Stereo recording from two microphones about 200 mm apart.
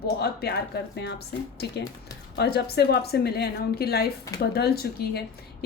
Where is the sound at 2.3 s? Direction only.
55° left (ahead or behind).